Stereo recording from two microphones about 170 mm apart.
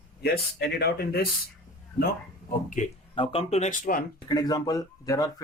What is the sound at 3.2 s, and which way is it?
Speech, 35° left (ahead or behind).